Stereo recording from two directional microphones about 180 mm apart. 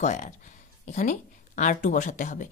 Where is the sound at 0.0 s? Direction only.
40° left (ahead or behind).